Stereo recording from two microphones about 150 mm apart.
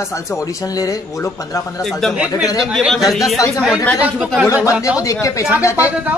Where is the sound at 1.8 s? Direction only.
Centre (ahead or behind).